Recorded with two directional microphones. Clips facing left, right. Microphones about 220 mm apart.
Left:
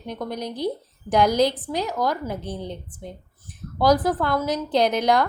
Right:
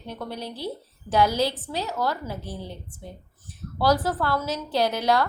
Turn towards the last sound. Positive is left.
turn(degrees=15)  # may be behind; listen again after turning